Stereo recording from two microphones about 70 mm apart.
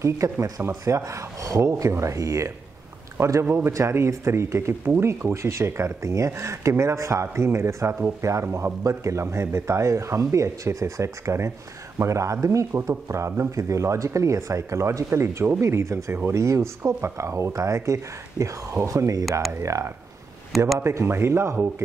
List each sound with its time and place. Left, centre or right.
0.0 s a man's voice: right
20.5 s speech: centre
20.8 s speech: right